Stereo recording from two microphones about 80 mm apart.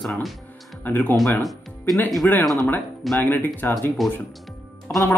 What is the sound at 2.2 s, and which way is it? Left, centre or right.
Speech, centre.